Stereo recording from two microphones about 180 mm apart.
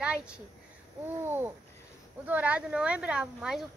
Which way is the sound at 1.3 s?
10° right (ahead or behind).